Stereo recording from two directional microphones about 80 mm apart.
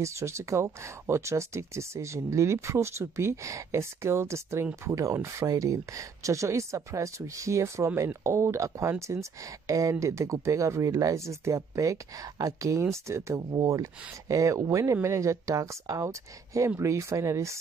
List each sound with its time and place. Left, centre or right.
0.0 s speech: right